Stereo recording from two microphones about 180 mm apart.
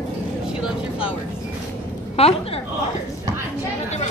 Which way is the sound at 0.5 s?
5° right (ahead or behind).